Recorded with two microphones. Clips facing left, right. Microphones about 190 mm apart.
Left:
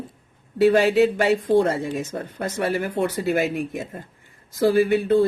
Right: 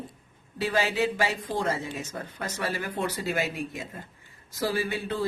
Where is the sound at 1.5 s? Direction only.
30° left (ahead or behind).